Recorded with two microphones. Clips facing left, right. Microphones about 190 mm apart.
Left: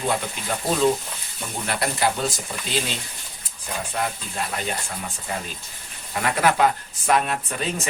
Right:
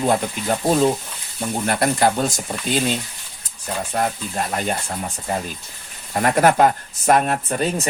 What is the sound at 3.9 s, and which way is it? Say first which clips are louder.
Speech: right 6 dB; 45° right (ahead or behind).